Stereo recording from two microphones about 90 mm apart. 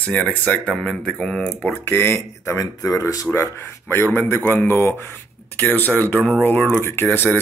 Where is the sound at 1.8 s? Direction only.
25° left (ahead or behind).